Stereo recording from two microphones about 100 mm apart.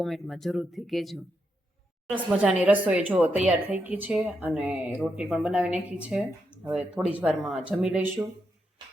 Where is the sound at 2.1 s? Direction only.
15° right (ahead or behind).